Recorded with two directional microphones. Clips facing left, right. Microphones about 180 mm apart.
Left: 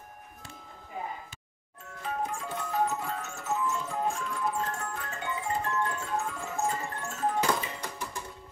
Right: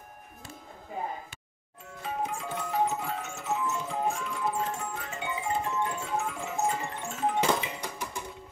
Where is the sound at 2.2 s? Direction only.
20° right (ahead or behind).